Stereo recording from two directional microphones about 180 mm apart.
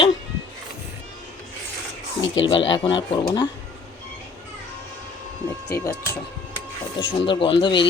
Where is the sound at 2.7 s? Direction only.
25° left (ahead or behind).